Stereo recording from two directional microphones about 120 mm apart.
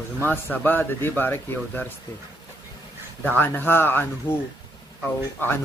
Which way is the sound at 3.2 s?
15° left (ahead or behind).